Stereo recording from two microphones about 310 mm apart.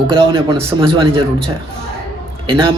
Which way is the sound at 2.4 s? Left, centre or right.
Centre.